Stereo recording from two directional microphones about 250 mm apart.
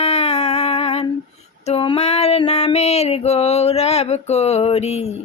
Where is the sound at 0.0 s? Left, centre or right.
Left.